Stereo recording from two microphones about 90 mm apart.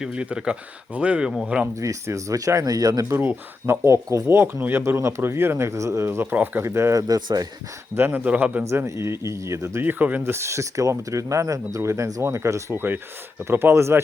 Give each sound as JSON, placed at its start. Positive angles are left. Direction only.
{"t": 0.0, "sound": "speech", "side_deg": -10}
{"t": 1.7, "sound": "speech", "side_deg": -35}
{"t": 3.1, "sound": "speech", "side_deg": -25}
{"t": 7.1, "sound": "speech", "side_deg": -45}
{"t": 7.9, "sound": "speech", "side_deg": -20}
{"t": 8.7, "sound": "speech", "side_deg": -30}